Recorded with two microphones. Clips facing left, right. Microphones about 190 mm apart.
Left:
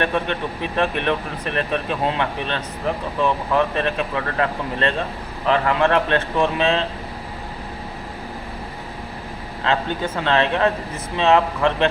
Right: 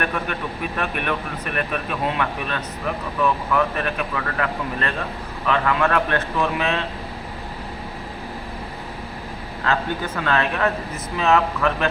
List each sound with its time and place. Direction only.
0.0 s speech: 30° left (ahead or behind)
9.6 s speech: 25° left (ahead or behind)